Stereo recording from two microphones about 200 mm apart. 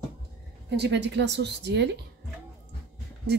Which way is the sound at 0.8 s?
60° right (ahead or behind).